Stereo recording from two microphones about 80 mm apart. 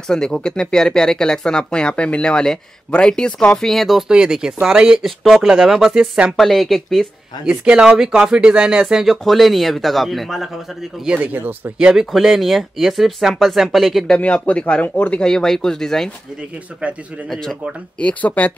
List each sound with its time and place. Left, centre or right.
0.1 s speech: centre
4.1 s speech: centre
7.4 s speech: centre
11.2 s speech: right
11.8 s speech: centre
14.1 s speech: centre
17.3 s speech: centre